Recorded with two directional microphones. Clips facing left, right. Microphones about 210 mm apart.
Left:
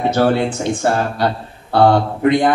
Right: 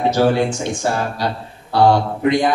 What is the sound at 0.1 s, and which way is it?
Speech, 55° left (ahead or behind).